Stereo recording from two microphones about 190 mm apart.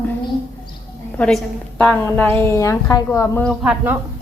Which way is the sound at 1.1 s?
5° left (ahead or behind).